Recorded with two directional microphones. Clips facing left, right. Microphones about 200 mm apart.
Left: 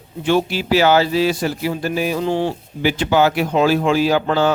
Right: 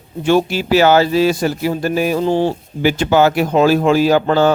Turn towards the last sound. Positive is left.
turn(degrees=-45)  # may be behind; listen again after turning